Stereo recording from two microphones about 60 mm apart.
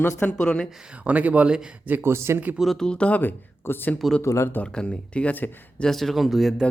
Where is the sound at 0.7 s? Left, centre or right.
Centre.